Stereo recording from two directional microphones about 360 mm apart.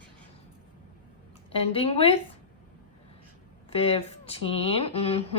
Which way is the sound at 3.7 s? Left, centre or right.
Centre.